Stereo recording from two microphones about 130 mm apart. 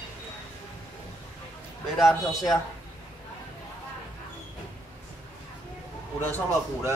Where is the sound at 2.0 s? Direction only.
Centre (ahead or behind).